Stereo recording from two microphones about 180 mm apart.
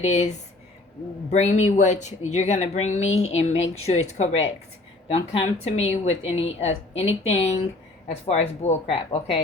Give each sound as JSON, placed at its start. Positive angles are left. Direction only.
{"t": 0.0, "sound": "a woman's voice", "side_deg": 40}